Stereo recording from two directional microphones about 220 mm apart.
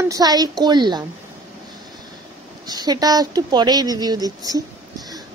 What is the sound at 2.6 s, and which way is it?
Speech, 20° right (ahead or behind).